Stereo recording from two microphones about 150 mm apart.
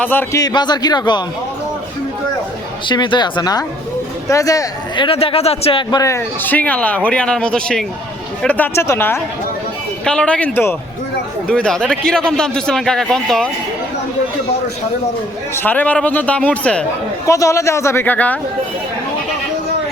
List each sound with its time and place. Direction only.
0.0 s speech: 10° left (ahead or behind)
0.3 s a man's voice: 25° left (ahead or behind)
2.8 s a man's voice: 30° left (ahead or behind)
5.0 s speech: 40° left (ahead or behind)
5.9 s a man's voice: 20° left (ahead or behind); by 13.5 s 5° left (ahead or behind)
15.5 s speech: 10° left (ahead or behind)
17.2 s a man's voice: 20° left (ahead or behind)